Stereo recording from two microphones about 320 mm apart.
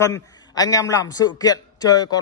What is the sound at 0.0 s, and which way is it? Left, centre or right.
A man's voice, centre.